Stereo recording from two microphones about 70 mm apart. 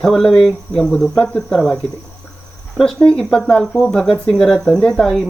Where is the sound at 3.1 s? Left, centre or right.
Centre.